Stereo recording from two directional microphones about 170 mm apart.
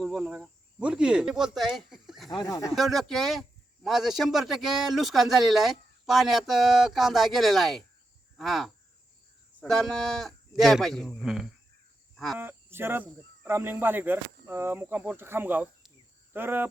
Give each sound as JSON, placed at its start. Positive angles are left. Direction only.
{"t": 0.0, "sound": "speech", "side_deg": 0}
{"t": 2.3, "sound": "speech", "side_deg": 20}
{"t": 2.7, "sound": "speech", "side_deg": 0}
{"t": 12.1, "sound": "cricket", "side_deg": 0}
{"t": 12.4, "sound": "speech", "side_deg": -15}